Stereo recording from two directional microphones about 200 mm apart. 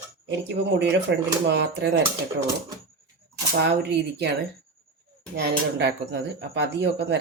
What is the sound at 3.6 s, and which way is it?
Speech, 60° right (ahead or behind).